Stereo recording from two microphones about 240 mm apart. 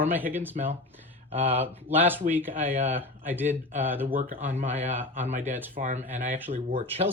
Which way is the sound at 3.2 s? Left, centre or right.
Centre.